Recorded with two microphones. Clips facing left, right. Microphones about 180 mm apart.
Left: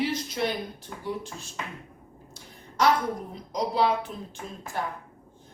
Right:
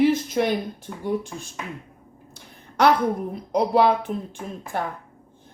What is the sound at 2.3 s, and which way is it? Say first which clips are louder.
A woman's voice: right 5 dB; 60° right (ahead or behind).